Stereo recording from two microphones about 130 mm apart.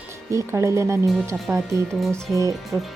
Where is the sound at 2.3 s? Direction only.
25° right (ahead or behind).